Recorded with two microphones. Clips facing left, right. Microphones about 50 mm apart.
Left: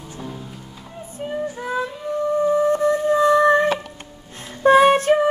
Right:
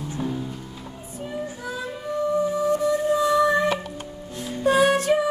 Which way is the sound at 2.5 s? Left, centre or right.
Left.